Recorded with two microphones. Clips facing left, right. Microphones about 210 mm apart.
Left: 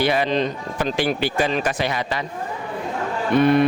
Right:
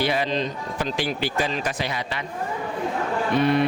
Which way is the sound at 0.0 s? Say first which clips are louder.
Left 4 dB; 60° left (ahead or behind).